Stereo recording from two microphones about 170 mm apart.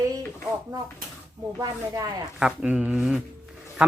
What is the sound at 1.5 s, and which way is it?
Speech, 20° right (ahead or behind).